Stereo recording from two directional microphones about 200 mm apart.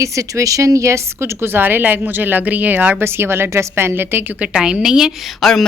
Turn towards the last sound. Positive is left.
turn(degrees=0)  # may be behind; listen again after turning